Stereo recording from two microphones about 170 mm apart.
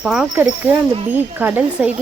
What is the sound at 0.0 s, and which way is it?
Speech, 5° right (ahead or behind).